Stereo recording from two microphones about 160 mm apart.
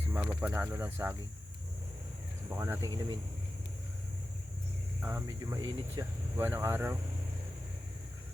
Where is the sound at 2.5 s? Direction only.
15° right (ahead or behind).